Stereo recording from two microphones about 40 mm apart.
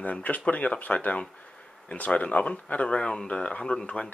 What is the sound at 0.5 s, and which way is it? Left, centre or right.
Speech, left.